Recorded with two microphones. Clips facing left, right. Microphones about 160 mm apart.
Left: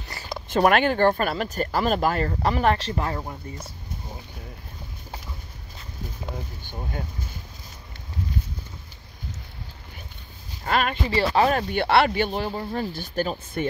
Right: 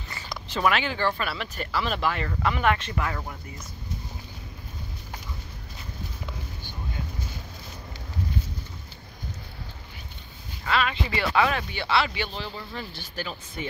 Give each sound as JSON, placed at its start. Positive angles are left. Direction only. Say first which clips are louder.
{"t": 0.5, "sound": "speech", "louder": "left 6 dB", "side_deg": 50}
{"t": 10.6, "sound": "speech", "louder": "left 2 dB", "side_deg": 45}
{"t": 11.1, "sound": "speech", "louder": "left 6 dB", "side_deg": 35}
{"t": 11.7, "sound": "speech", "louder": "left 6 dB", "side_deg": 55}